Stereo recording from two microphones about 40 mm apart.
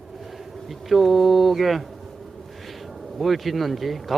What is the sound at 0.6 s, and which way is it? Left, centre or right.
Speech, centre.